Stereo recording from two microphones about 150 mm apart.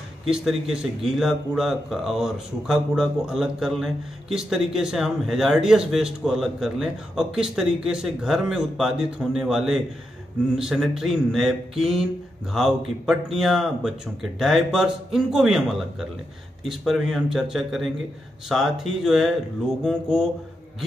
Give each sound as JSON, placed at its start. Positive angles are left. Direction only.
{"t": 0.3, "sound": "a man's voice", "side_deg": -5}